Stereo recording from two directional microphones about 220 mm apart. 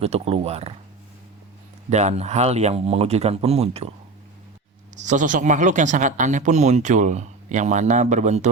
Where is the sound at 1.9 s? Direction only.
30° right (ahead or behind).